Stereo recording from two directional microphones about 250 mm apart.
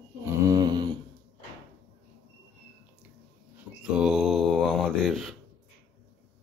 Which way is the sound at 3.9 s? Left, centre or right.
Centre.